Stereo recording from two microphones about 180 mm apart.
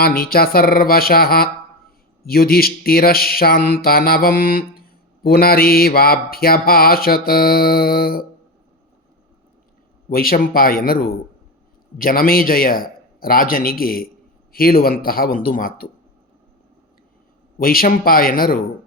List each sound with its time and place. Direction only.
0.0 s mantra: 55° left (ahead or behind)
10.1 s mantra: 55° left (ahead or behind)
17.6 s mantra: 55° left (ahead or behind)